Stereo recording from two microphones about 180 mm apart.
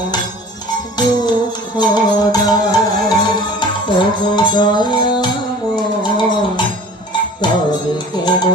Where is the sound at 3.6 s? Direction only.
25° left (ahead or behind).